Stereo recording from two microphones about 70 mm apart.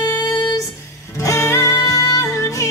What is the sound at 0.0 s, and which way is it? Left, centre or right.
Music, left.